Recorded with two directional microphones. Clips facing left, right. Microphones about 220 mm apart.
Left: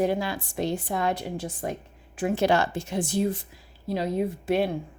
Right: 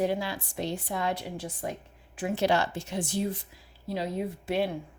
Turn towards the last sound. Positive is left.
turn(degrees=50)  # may be behind; listen again after turning